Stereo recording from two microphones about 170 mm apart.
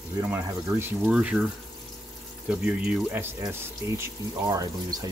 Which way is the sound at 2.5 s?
5° right (ahead or behind).